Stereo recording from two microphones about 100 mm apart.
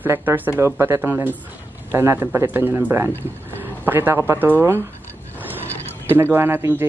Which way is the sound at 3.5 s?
20° right (ahead or behind).